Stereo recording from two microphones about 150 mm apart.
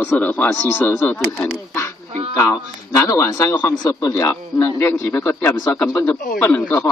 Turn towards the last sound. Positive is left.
turn(degrees=15)  # may be behind; listen again after turning